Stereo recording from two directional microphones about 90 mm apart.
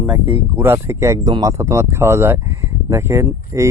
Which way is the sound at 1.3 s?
45° right (ahead or behind).